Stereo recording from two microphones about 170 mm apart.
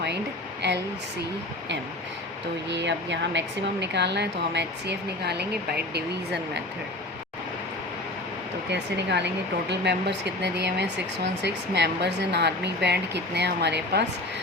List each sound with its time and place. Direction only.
2.6 s speech: 90° right
8.7 s speech: 90° right